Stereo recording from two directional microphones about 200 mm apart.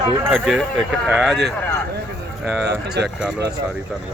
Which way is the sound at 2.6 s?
55° right (ahead or behind).